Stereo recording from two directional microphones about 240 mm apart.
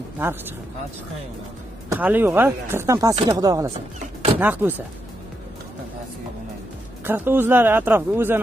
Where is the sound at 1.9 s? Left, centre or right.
Centre.